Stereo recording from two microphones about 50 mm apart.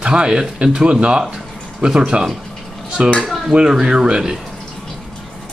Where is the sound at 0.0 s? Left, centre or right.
Centre.